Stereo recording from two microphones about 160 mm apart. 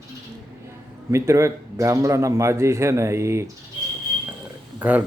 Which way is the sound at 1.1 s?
20° right (ahead or behind).